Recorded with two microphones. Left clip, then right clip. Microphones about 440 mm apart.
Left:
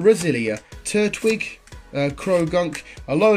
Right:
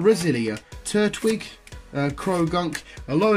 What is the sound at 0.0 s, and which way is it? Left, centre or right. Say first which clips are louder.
A man's voice: left 3 dB; centre.